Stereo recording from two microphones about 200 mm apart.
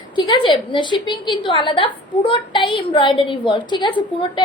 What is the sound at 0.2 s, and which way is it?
A woman's voice, 25° left (ahead or behind).